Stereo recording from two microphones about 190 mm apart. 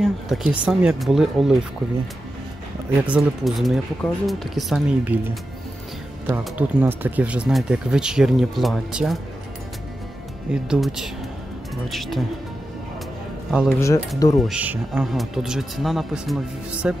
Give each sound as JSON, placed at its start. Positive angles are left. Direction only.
{"t": 0.0, "sound": "speech", "side_deg": -5}
{"t": 3.1, "sound": "speech", "side_deg": 0}
{"t": 6.2, "sound": "speech", "side_deg": -10}
{"t": 10.5, "sound": "speech", "side_deg": -5}
{"t": 13.5, "sound": "a man's voice", "side_deg": 0}
{"t": 13.7, "sound": "speech", "side_deg": 15}
{"t": 14.4, "sound": "speech", "side_deg": -5}